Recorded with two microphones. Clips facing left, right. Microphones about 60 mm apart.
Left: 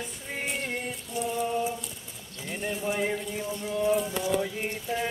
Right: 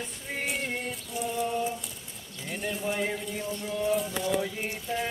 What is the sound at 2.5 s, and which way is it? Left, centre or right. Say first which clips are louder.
Speech: left 1 dB; centre.